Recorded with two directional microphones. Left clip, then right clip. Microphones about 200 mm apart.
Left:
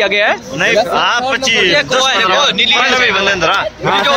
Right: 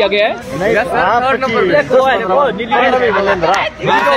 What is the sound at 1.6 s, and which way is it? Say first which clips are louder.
A man's voice: right 4 dB; 20° right (ahead or behind).